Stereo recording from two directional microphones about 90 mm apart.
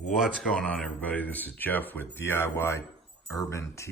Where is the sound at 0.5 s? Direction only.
10° left (ahead or behind).